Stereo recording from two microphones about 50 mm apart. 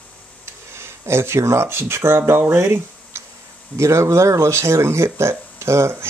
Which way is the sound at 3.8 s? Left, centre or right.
Right.